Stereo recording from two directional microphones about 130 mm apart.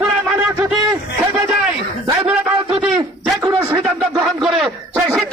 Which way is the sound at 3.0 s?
25° right (ahead or behind).